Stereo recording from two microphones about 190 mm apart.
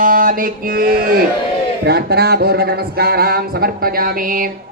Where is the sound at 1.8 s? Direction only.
60° right (ahead or behind).